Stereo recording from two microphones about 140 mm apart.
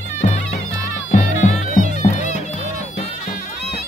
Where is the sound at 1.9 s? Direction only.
60° left (ahead or behind).